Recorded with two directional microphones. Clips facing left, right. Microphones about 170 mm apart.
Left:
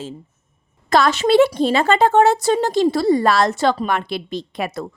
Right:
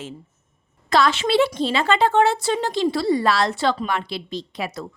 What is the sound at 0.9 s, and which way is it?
Speech, 45° left (ahead or behind).